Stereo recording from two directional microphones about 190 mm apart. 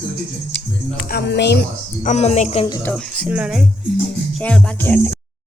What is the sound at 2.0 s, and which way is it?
Speech, 35° left (ahead or behind).